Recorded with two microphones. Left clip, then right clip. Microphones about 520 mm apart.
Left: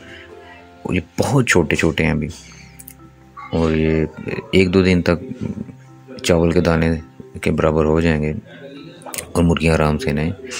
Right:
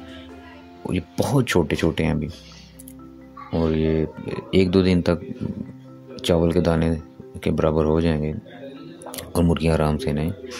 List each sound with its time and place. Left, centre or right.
0.8 s speech: right
3.5 s speech: right